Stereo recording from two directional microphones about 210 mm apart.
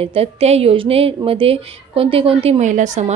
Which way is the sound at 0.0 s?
30° right (ahead or behind).